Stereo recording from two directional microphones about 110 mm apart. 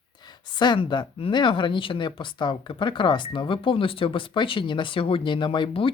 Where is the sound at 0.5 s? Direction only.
45° left (ahead or behind).